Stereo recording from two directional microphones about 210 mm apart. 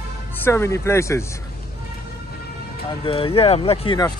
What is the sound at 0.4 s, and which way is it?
Speech, 10° left (ahead or behind).